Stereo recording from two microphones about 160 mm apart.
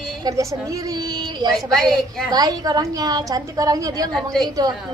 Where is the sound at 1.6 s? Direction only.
Centre (ahead or behind).